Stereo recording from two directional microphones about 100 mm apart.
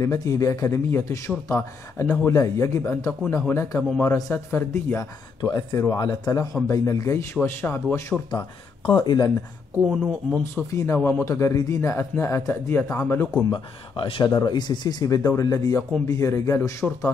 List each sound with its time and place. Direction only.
0.0 s a man's voice: 30° left (ahead or behind)
5.4 s a man's voice: 40° left (ahead or behind); by 8.2 s 25° left (ahead or behind)
8.9 s speech: 40° left (ahead or behind)
9.8 s speech: 15° right (ahead or behind)
10.4 s a man's voice: 25° left (ahead or behind)
13.5 s speech: 55° left (ahead or behind)
14.3 s a man's voice: 45° left (ahead or behind); by 16.7 s 25° left (ahead or behind)